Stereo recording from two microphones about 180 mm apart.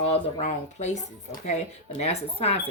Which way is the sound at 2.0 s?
35° left (ahead or behind).